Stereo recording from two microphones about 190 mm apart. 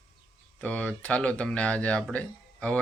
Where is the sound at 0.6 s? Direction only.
5° left (ahead or behind).